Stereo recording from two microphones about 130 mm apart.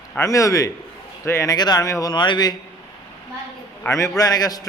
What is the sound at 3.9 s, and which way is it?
Speech, 25° left (ahead or behind).